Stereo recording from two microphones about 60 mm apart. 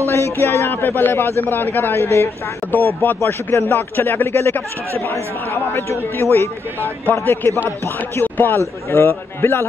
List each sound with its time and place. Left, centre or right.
0.1 s a man's voice: left
3.3 s a man's voice: left